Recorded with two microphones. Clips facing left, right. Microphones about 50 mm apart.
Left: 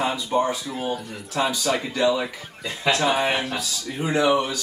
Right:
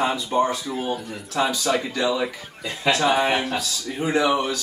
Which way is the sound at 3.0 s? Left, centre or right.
Centre.